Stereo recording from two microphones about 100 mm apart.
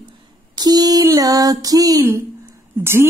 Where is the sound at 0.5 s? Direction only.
40° right (ahead or behind).